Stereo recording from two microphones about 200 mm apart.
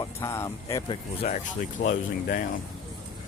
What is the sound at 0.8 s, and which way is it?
Speech, 30° left (ahead or behind).